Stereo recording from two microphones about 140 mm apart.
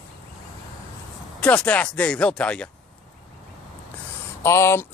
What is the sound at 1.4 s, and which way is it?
Speech, 10° left (ahead or behind).